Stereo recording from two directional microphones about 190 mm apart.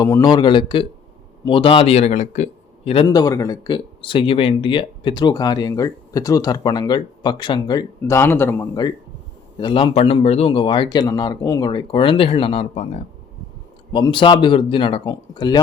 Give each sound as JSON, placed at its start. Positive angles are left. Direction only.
{"t": 0.0, "sound": "speech", "side_deg": 20}
{"t": 13.9, "sound": "speech", "side_deg": 25}